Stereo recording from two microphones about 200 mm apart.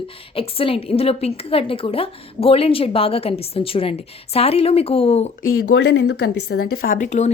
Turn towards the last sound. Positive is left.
turn(degrees=35)  # may be behind; listen again after turning